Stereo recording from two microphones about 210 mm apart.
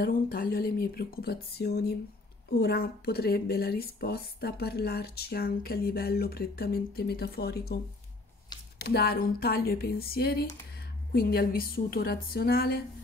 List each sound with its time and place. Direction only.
0.0 s speech: 45° left (ahead or behind)
8.7 s speech: 50° left (ahead or behind)